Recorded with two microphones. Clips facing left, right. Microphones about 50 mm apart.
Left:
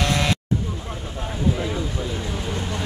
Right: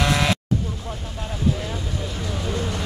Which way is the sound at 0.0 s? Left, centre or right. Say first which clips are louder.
Right 1 dB; centre.